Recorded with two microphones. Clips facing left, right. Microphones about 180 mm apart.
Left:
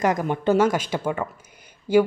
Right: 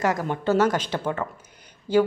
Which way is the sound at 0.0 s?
15° left (ahead or behind).